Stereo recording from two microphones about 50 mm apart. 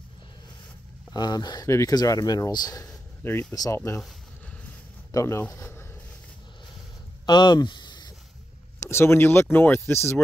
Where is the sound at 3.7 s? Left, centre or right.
Left.